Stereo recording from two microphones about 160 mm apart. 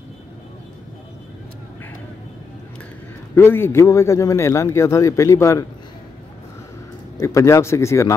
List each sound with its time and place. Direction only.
3.3 s a man's voice: 15° left (ahead or behind)
7.2 s a man's voice: 20° left (ahead or behind)